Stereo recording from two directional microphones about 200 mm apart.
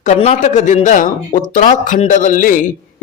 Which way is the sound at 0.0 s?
35° left (ahead or behind).